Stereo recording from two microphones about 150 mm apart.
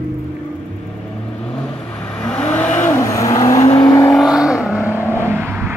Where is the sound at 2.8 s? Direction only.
20° left (ahead or behind).